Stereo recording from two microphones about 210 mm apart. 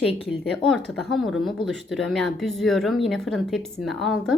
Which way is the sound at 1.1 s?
Centre (ahead or behind).